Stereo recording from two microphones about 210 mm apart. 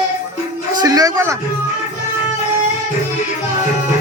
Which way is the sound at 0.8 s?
15° right (ahead or behind).